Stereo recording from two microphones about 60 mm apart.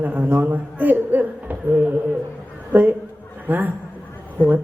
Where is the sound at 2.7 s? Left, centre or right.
Right.